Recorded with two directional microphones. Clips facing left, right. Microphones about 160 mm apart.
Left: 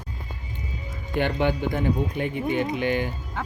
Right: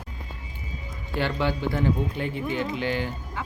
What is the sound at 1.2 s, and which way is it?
Speech, 55° left (ahead or behind).